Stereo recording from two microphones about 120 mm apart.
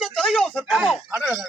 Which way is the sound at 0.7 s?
5° right (ahead or behind).